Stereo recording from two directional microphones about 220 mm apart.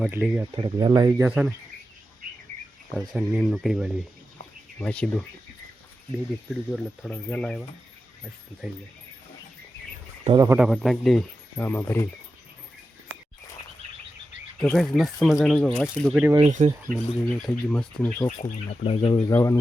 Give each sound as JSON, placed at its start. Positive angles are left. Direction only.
{"t": 0.0, "sound": "speech", "side_deg": -5}
{"t": 0.5, "sound": "speech", "side_deg": -20}
{"t": 2.9, "sound": "speech", "side_deg": -5}
{"t": 6.7, "sound": "speech", "side_deg": 0}
{"t": 8.6, "sound": "speech", "side_deg": 0}
{"t": 10.2, "sound": "speech", "side_deg": -15}
{"t": 14.6, "sound": "speech", "side_deg": 0}
{"t": 16.4, "sound": "speech", "side_deg": -35}
{"t": 16.9, "sound": "speech", "side_deg": 5}
{"t": 18.3, "sound": "speech", "side_deg": 35}
{"t": 19.3, "sound": "speech", "side_deg": 15}